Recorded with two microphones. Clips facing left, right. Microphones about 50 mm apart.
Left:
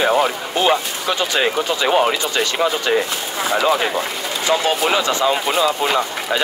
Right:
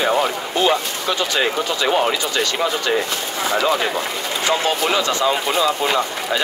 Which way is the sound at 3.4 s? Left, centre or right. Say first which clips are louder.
Left 1 dB; centre.